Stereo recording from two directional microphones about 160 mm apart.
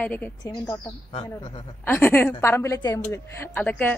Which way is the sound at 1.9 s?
15° left (ahead or behind).